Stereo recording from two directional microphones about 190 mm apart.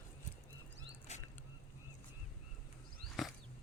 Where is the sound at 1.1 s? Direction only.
40° left (ahead or behind).